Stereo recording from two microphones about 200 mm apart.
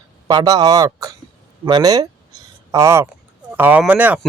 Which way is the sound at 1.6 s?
20° right (ahead or behind).